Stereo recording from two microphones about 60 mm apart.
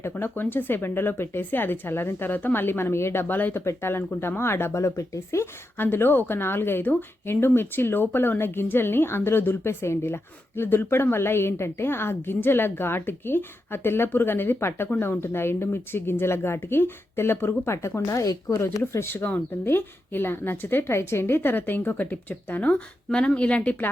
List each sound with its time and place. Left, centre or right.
0.0 s a woman's voice: left
3.5 s speech: left
5.7 s a woman's voice: left
18.8 s a woman's voice: left